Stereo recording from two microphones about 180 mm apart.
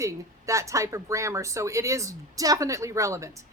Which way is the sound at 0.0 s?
15° right (ahead or behind).